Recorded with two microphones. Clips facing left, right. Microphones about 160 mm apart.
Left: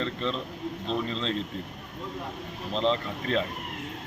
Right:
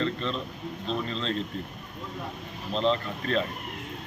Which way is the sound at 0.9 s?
20° left (ahead or behind).